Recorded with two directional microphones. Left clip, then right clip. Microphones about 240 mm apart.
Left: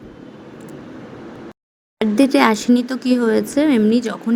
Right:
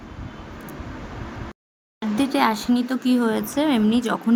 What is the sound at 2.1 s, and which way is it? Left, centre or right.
Speech, centre.